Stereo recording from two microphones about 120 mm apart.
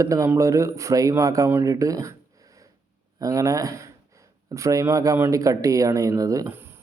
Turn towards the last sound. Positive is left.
turn(degrees=-20)  # may be behind; listen again after turning